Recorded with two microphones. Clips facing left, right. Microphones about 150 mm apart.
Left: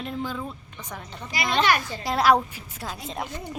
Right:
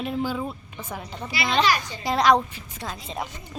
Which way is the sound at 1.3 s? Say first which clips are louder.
Even; 45° left (ahead or behind).